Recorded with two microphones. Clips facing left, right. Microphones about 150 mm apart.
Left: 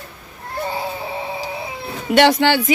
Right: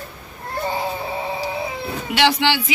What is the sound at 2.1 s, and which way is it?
Speech, 45° left (ahead or behind).